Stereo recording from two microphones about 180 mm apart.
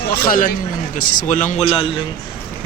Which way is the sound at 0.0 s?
55° left (ahead or behind).